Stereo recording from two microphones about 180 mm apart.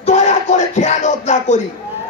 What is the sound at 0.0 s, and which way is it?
Music, 40° left (ahead or behind).